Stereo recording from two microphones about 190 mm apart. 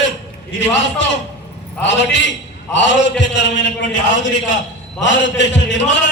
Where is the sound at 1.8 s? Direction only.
70° left (ahead or behind).